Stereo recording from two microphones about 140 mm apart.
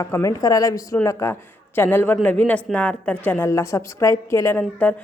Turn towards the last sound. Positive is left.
turn(degrees=10)  # may be behind; listen again after turning